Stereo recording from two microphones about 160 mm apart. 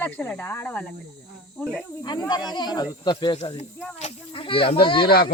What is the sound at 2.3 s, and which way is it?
Speech, 25° left (ahead or behind).